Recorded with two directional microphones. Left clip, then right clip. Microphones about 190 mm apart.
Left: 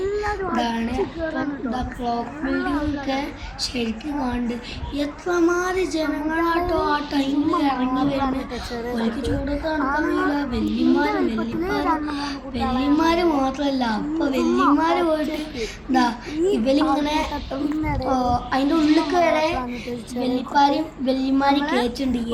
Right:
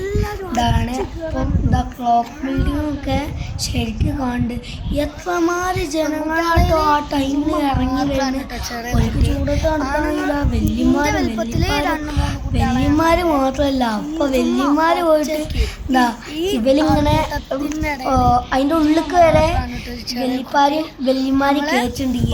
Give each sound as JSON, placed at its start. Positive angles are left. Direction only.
{"t": 0.5, "sound": "a sound", "side_deg": -15}
{"t": 1.7, "sound": "child singing", "side_deg": -15}
{"t": 4.9, "sound": "child singing", "side_deg": -20}
{"t": 10.1, "sound": "child singing", "side_deg": -20}
{"t": 21.6, "sound": "a woman's voice", "side_deg": -70}